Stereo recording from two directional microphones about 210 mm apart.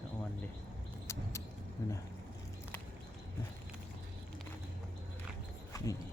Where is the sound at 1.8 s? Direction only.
15° left (ahead or behind).